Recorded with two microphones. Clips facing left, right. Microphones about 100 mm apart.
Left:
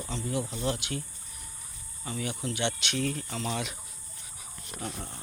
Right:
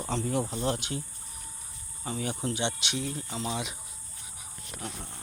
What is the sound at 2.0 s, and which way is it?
Speech, 35° right (ahead or behind).